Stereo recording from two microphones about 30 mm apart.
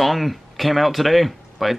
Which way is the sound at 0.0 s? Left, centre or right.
Centre.